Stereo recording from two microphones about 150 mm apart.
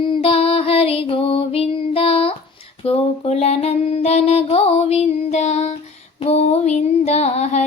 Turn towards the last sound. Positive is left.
turn(degrees=50)  # may be behind; listen again after turning